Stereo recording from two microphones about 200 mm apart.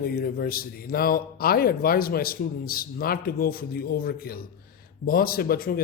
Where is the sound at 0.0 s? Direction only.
50° left (ahead or behind).